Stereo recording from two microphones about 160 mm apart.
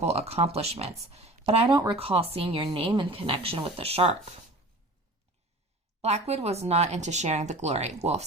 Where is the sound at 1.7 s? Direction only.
30° right (ahead or behind).